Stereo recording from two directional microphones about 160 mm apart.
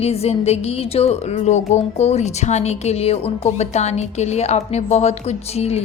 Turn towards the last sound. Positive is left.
turn(degrees=40)  # may be behind; listen again after turning